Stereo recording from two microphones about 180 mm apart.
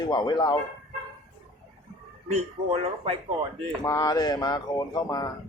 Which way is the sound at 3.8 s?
20° left (ahead or behind).